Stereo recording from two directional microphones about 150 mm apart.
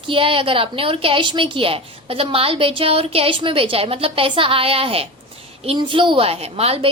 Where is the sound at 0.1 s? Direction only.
35° right (ahead or behind).